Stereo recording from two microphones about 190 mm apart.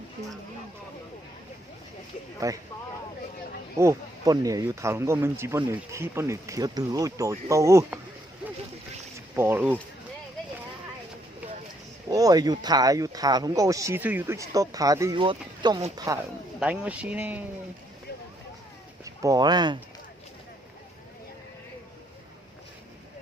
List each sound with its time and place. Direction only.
2.4 s a man's voice: 15° right (ahead or behind)
3.8 s a man's voice: 15° right (ahead or behind)
9.3 s speech: 10° right (ahead or behind)
12.1 s a man's voice: 20° right (ahead or behind)
16.6 s a man's voice: 5° right (ahead or behind)
19.0 s speech: 20° right (ahead or behind)